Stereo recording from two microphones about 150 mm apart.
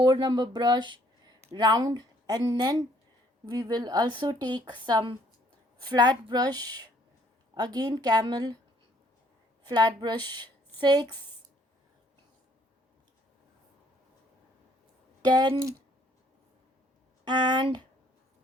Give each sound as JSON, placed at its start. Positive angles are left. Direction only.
{"t": 0.0, "sound": "a woman's voice", "side_deg": -30}
{"t": 9.6, "sound": "a woman's voice", "side_deg": -30}
{"t": 15.2, "sound": "a woman's voice", "side_deg": -30}
{"t": 17.2, "sound": "a woman's voice", "side_deg": -30}